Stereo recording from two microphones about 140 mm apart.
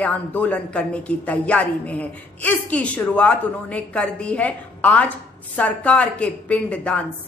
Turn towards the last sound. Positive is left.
turn(degrees=10)  # may be behind; listen again after turning